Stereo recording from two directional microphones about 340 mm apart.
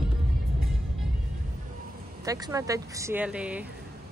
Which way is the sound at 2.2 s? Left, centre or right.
Centre.